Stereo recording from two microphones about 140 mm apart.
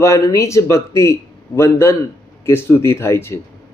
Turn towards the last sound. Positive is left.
turn(degrees=20)  # may be behind; listen again after turning